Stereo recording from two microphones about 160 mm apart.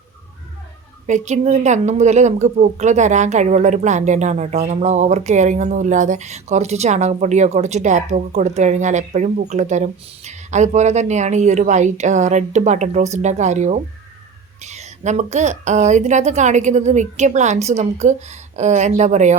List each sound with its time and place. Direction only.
1.0 s a woman's voice: 45° right (ahead or behind)